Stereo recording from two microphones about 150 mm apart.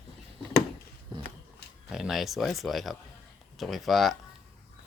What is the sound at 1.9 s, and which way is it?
Speech, 5° right (ahead or behind).